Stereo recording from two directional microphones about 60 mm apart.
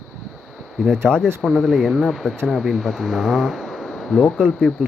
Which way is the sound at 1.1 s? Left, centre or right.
Centre.